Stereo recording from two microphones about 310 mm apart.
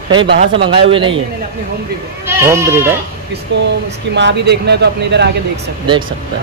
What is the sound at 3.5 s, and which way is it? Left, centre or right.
Speech, right.